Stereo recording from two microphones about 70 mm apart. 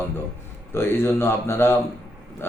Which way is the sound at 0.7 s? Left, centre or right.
Left.